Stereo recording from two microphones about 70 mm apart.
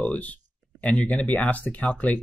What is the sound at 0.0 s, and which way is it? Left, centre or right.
Speech, left.